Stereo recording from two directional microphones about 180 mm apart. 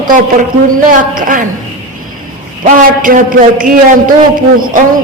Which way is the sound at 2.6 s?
45° right (ahead or behind).